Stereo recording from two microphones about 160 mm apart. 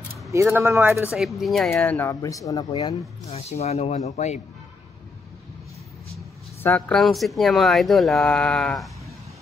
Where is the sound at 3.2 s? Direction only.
40° left (ahead or behind).